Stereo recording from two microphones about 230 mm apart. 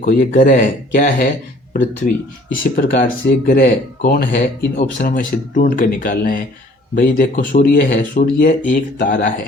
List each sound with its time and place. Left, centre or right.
0.0 s speech: left
2.5 s speech: left